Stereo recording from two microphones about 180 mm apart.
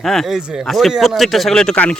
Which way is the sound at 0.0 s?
Centre (ahead or behind).